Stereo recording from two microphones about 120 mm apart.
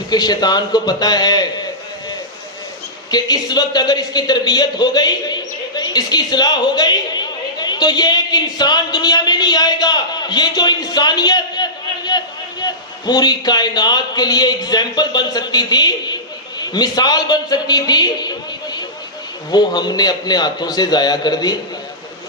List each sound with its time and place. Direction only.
0.1 s a man's voice: 35° left (ahead or behind)
3.1 s a man's voice: 35° left (ahead or behind)